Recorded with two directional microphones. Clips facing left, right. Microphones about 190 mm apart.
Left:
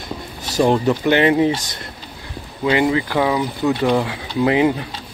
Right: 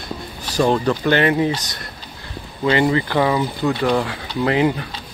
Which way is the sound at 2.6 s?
10° left (ahead or behind).